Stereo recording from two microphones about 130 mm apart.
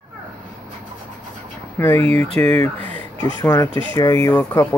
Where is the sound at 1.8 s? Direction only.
15° left (ahead or behind).